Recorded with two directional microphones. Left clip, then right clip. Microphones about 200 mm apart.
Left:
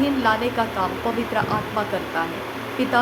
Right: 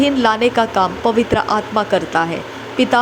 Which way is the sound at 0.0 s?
40° right (ahead or behind).